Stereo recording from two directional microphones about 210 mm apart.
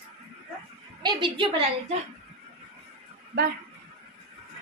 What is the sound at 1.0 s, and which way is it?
Speech, 25° right (ahead or behind).